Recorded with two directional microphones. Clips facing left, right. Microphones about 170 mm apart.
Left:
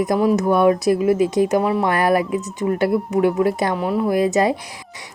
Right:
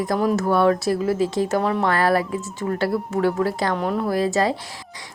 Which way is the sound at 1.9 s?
20° left (ahead or behind).